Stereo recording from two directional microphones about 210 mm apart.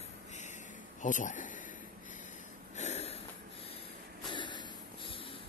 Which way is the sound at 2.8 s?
30° left (ahead or behind).